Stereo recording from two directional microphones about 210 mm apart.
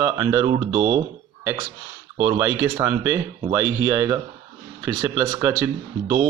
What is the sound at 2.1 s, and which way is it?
Speech, 20° right (ahead or behind).